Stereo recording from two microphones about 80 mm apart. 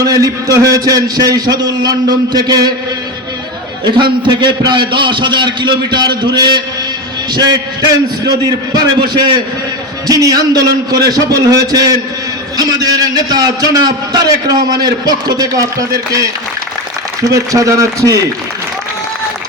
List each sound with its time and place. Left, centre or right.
0.0 s a man's voice: right
3.8 s a man's voice: right
7.3 s a man's voice: right
10.1 s a man's voice: right
13.3 s a man's voice: right
17.2 s a man's voice: right